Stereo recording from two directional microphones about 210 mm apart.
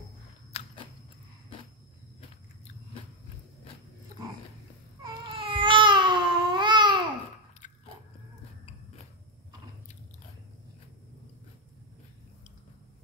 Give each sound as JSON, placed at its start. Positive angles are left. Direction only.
{"t": 0.5, "sound": "biting", "side_deg": 30}
{"t": 5.0, "sound": "babbling", "side_deg": -25}
{"t": 7.6, "sound": "biting", "side_deg": 35}